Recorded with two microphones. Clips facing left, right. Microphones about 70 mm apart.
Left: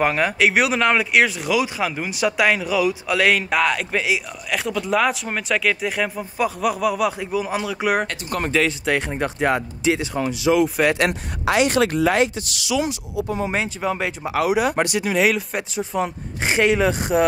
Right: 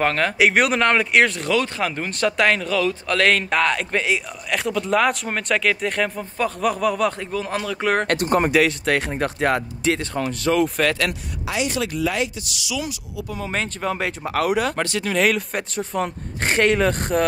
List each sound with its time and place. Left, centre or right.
0.0 s speech: centre
8.4 s speech: centre
8.6 s speech: centre
11.4 s speech: left
12.8 s speech: left
13.6 s speech: centre